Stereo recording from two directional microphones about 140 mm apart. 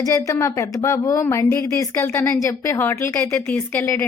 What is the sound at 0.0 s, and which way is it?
Speech, 25° left (ahead or behind).